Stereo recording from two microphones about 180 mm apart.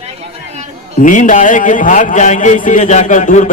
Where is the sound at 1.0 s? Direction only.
45° left (ahead or behind).